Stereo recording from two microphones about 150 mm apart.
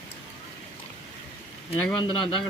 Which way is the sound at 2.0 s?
30° left (ahead or behind).